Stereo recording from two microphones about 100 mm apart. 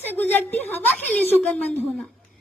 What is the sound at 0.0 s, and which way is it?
A woman's voice, 20° left (ahead or behind).